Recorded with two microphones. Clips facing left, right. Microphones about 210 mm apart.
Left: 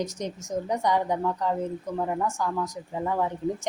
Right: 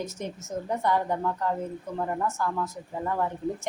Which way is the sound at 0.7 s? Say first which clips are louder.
Left 1 dB; 15° left (ahead or behind).